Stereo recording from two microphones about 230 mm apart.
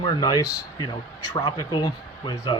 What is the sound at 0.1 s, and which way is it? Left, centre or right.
Speech, centre.